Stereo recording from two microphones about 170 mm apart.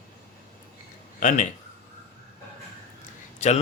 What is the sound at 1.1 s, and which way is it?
Speech, 45° left (ahead or behind).